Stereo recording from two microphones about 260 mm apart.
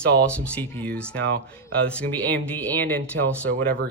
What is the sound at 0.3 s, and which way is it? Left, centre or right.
Speech, centre.